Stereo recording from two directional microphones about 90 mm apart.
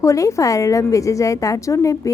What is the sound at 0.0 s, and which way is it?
A woman's voice, 35° left (ahead or behind).